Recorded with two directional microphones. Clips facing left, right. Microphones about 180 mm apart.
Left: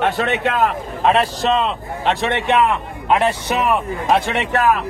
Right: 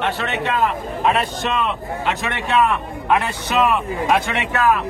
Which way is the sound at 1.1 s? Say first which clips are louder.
Left 7 dB; 35° left (ahead or behind).